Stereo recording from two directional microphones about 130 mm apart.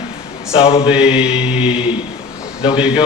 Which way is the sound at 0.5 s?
45° left (ahead or behind).